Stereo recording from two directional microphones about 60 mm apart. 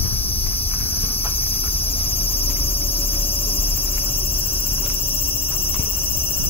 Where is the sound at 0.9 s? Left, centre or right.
Left.